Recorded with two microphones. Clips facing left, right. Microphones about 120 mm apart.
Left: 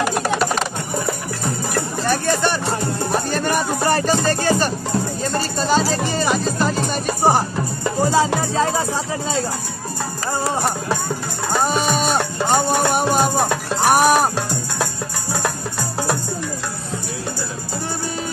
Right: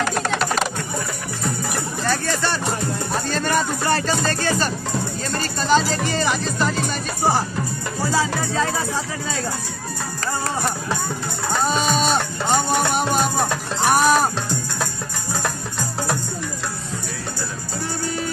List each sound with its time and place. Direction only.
0.0 s music: 10° left (ahead or behind)
2.0 s a sound: 20° left (ahead or behind)
3.3 s speech: 15° left (ahead or behind)
8.0 s speech: 20° left (ahead or behind)
10.2 s music: 20° left (ahead or behind)